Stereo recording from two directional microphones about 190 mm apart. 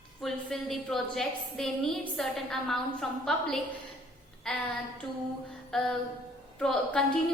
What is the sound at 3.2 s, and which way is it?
A woman's voice, 5° left (ahead or behind).